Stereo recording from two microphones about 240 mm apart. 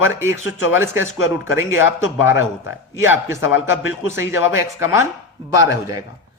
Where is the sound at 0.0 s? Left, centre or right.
Centre.